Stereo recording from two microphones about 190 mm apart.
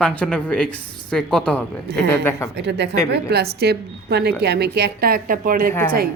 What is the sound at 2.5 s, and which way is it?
A woman's voice, 65° right (ahead or behind).